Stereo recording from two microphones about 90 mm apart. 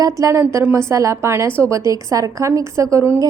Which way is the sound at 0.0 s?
35° right (ahead or behind).